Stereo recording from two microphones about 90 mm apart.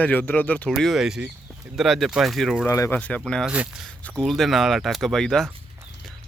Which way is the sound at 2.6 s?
35° left (ahead or behind).